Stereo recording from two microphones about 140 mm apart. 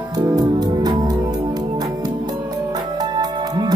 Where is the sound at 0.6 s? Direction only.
30° right (ahead or behind).